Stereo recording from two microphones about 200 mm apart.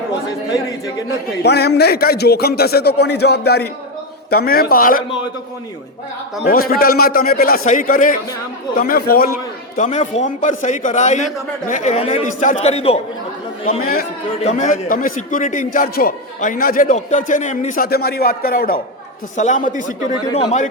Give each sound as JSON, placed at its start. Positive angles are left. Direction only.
{"t": 1.4, "sound": "a man's voice", "side_deg": 55}
{"t": 6.5, "sound": "a man's voice", "side_deg": 50}
{"t": 13.8, "sound": "a man's voice", "side_deg": 50}
{"t": 17.8, "sound": "a man's voice", "side_deg": 50}